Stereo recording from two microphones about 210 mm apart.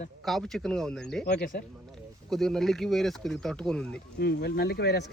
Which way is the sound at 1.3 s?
45° left (ahead or behind).